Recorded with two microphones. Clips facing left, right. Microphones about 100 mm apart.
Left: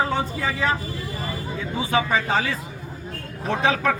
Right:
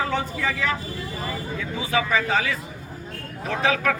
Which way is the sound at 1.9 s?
30° left (ahead or behind).